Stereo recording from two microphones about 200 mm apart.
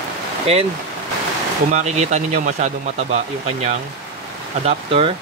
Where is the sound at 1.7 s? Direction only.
35° right (ahead or behind).